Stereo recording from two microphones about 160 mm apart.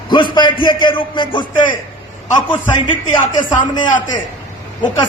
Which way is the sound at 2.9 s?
30° left (ahead or behind).